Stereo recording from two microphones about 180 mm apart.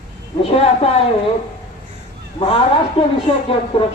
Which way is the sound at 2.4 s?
30° left (ahead or behind).